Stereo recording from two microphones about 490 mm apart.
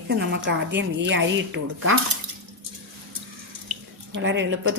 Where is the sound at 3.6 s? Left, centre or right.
Right.